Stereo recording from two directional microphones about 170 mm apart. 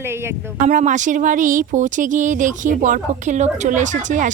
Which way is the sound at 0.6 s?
45° right (ahead or behind).